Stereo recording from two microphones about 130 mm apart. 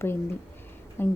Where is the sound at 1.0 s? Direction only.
15° left (ahead or behind).